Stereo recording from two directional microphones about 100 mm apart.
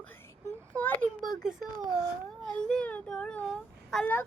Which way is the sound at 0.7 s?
10° left (ahead or behind).